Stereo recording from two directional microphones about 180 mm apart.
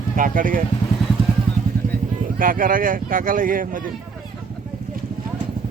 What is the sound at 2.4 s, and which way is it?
Speech, 50° right (ahead or behind).